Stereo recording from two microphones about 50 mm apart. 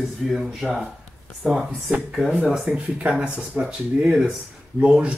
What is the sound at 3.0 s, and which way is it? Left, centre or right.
Speech, right.